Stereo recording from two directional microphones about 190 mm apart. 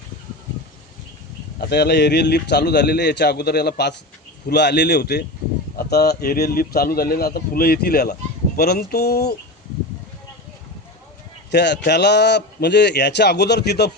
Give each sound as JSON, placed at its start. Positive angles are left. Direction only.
{"t": 1.5, "sound": "a man's voice", "side_deg": 60}
{"t": 11.5, "sound": "a man's voice", "side_deg": 65}